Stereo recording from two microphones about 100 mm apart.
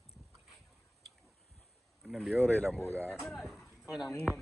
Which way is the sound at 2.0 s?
Centre (ahead or behind).